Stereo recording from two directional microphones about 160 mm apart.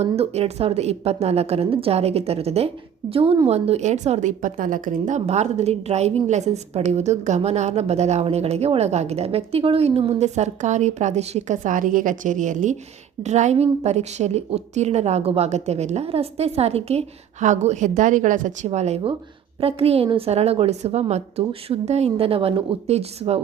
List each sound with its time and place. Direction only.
0.0 s a woman's voice: 40° right (ahead or behind)